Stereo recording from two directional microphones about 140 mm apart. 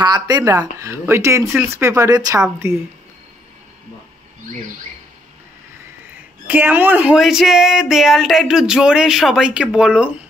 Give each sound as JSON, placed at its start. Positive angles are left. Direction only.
{"t": 0.0, "sound": "speech", "side_deg": -30}
{"t": 6.4, "sound": "speech", "side_deg": -15}